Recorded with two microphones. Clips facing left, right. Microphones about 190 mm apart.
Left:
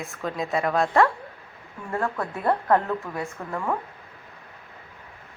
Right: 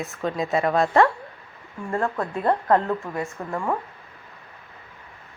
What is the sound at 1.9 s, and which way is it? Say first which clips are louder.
A woman's voice: right 2 dB; 15° right (ahead or behind).